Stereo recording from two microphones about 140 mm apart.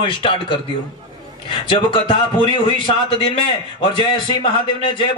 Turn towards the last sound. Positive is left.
turn(degrees=35)  # may be behind; listen again after turning